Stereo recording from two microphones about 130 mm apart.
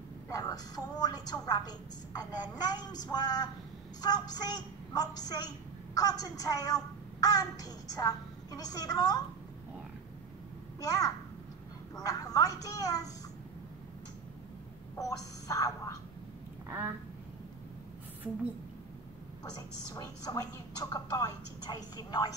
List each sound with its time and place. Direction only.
0.3 s a woman's voice: 30° left (ahead or behind)
10.8 s a child's voice: 30° left (ahead or behind)
15.0 s a woman's voice: 25° left (ahead or behind)
16.6 s a sound: 15° right (ahead or behind)
19.5 s a woman's voice: 30° left (ahead or behind)